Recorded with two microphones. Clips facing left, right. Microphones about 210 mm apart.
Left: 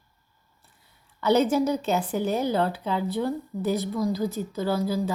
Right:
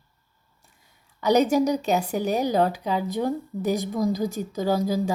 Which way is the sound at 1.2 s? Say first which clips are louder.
Right 2 dB; 15° right (ahead or behind).